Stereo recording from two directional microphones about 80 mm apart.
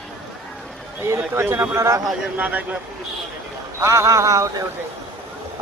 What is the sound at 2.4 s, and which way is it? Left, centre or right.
Speech, right.